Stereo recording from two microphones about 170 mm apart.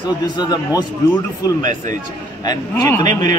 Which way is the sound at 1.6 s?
50° right (ahead or behind).